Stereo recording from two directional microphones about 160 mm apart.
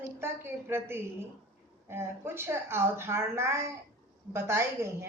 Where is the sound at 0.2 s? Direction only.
15° right (ahead or behind).